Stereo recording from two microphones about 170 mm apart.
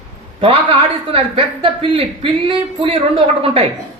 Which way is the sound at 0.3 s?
35° right (ahead or behind).